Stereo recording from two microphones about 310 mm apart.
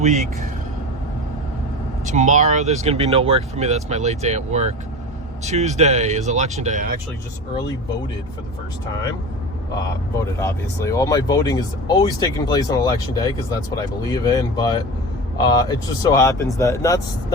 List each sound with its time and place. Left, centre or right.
0.0 s speech: right
2.0 s speech: right
10.4 s speech: centre